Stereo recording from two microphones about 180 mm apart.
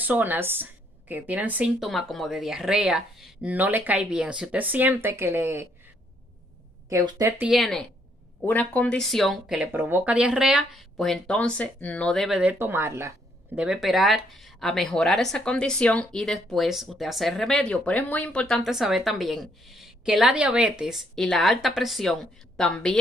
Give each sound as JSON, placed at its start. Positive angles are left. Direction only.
{"t": 0.0, "sound": "a woman's voice", "side_deg": -10}
{"t": 6.9, "sound": "a woman's voice", "side_deg": -20}
{"t": 7.3, "sound": "speech", "side_deg": -5}
{"t": 13.6, "sound": "speech", "side_deg": -5}